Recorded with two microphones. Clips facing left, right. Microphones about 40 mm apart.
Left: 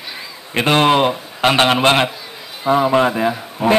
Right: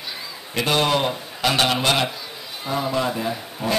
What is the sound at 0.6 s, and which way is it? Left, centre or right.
A woman's voice, left.